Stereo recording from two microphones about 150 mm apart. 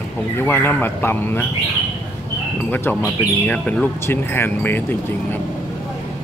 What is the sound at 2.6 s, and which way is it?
A man's voice, 10° left (ahead or behind).